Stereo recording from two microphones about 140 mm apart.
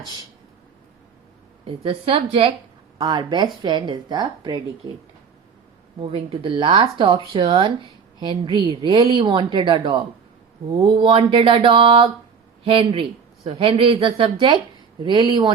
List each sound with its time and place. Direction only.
1.6 s speech: 40° right (ahead or behind)
3.0 s speech: 30° right (ahead or behind)
6.0 s speech: 40° right (ahead or behind)